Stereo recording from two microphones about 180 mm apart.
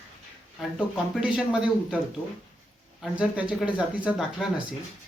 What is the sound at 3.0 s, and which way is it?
Speech, 5° right (ahead or behind).